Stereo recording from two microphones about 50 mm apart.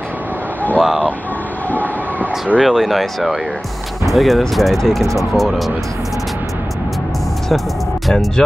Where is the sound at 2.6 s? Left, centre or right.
Centre.